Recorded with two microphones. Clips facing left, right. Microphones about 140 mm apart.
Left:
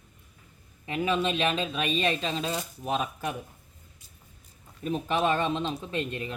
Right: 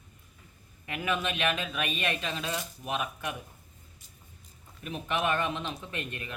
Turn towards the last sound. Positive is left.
turn(degrees=30)  # may be behind; listen again after turning